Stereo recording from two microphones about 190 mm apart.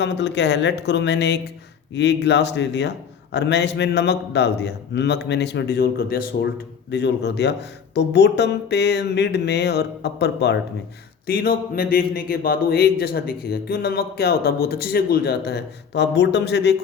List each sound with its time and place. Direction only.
0.0 s a man's voice: 65° left (ahead or behind)